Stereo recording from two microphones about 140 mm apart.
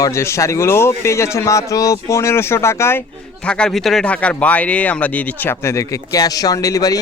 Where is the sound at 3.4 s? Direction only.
5° left (ahead or behind).